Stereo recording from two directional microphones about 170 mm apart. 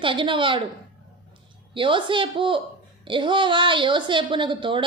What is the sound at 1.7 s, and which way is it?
A woman's voice, 30° right (ahead or behind).